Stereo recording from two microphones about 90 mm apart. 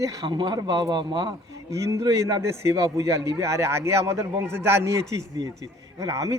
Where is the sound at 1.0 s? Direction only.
60° right (ahead or behind).